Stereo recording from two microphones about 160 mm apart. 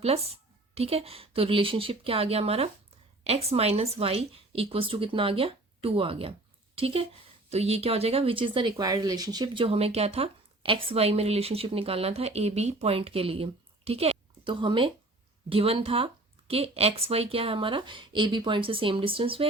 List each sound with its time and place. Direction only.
0.0 s speech: 40° right (ahead or behind)
9.6 s speech: 40° right (ahead or behind)